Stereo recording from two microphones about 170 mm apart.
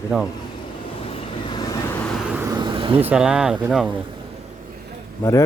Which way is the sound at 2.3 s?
20° right (ahead or behind).